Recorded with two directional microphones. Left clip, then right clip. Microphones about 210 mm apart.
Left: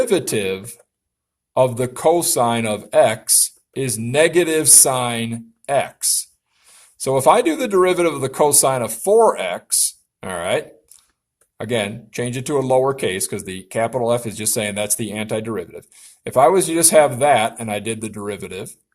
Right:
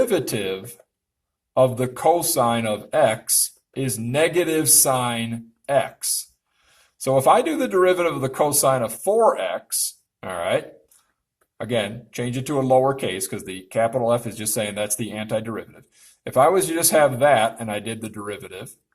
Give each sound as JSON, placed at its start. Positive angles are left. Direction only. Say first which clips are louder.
{"t": 0.0, "sound": "speech", "louder": "left 3 dB", "side_deg": 45}